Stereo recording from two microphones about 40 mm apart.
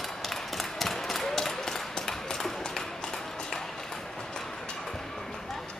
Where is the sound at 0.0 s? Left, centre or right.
Centre.